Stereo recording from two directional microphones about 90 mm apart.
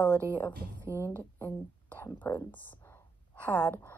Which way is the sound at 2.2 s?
20° left (ahead or behind).